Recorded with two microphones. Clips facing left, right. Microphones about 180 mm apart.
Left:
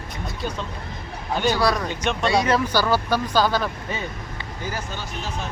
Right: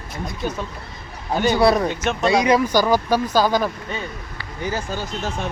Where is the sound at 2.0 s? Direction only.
5° right (ahead or behind).